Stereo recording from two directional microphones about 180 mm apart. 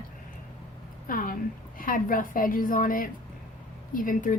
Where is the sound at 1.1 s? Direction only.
50° left (ahead or behind).